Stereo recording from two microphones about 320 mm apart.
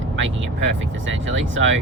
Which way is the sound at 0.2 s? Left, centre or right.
Right.